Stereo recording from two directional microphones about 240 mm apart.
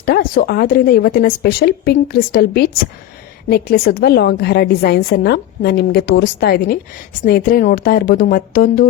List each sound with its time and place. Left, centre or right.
0.0 s a woman's voice: left